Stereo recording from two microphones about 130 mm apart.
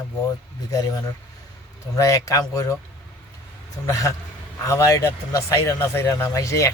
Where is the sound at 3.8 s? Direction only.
25° left (ahead or behind).